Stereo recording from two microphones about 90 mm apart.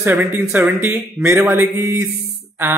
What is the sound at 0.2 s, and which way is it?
A man's voice, 20° right (ahead or behind).